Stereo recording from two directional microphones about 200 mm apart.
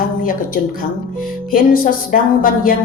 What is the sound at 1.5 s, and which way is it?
Music, 45° left (ahead or behind).